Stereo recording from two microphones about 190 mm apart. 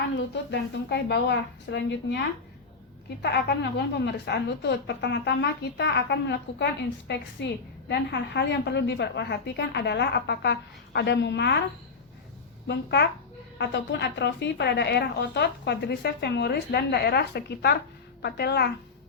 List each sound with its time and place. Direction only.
0.5 s a woman's voice: 60° left (ahead or behind)
12.6 s a woman's voice: 60° left (ahead or behind)